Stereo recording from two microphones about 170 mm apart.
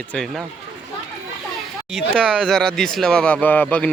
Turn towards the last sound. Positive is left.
turn(degrees=10)  # may be behind; listen again after turning